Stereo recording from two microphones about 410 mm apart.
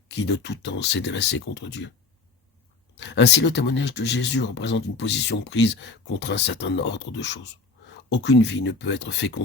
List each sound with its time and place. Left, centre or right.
0.1 s speech: left
3.0 s speech: left